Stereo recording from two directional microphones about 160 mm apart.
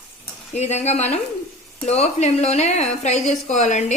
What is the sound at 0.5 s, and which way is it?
A woman's voice, 45° left (ahead or behind).